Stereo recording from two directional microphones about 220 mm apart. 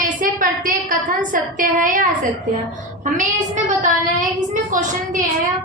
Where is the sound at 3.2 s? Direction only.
35° right (ahead or behind).